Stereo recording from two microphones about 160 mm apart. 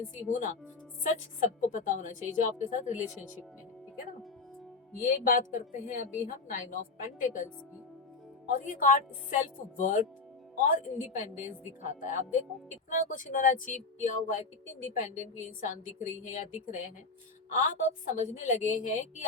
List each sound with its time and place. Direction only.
0.3 s a woman's voice: 50° left (ahead or behind)
5.0 s a woman's voice: 65° left (ahead or behind)